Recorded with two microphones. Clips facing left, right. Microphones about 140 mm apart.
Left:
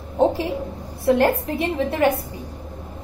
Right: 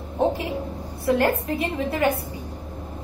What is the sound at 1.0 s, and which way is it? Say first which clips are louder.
A woman's voice: left 3 dB; 25° left (ahead or behind).